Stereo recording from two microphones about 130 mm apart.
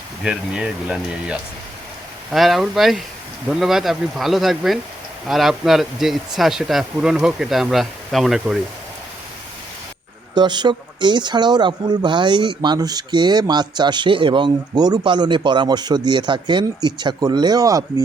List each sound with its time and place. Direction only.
0.2 s speech: 5° right (ahead or behind)
10.3 s speech: 35° right (ahead or behind)